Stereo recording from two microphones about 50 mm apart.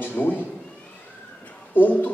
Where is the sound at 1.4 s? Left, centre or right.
Left.